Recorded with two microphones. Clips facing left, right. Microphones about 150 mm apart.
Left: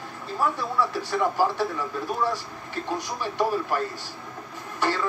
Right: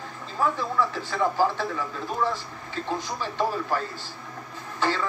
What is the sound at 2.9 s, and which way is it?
Speech, 10° left (ahead or behind).